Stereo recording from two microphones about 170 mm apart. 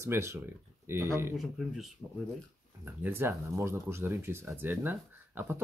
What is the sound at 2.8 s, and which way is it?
Speech, 15° right (ahead or behind).